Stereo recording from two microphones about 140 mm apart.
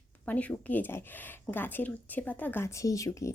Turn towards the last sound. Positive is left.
turn(degrees=25)  # may be behind; listen again after turning